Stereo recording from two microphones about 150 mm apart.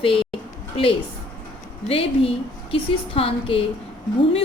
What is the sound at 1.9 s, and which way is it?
Speech, 40° left (ahead or behind).